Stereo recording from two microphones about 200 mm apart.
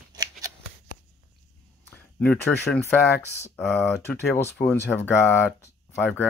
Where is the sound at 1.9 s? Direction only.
10° left (ahead or behind).